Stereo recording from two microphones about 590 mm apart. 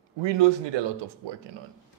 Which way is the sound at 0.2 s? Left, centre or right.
Right.